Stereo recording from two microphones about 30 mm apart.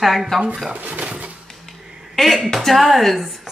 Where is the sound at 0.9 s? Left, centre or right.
Right.